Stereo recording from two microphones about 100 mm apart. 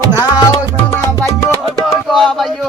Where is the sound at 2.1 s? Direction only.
Centre (ahead or behind).